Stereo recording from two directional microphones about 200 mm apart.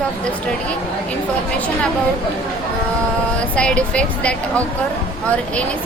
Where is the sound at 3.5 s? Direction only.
5° left (ahead or behind).